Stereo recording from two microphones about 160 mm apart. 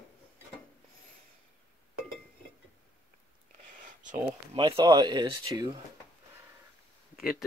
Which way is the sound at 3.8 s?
50° right (ahead or behind).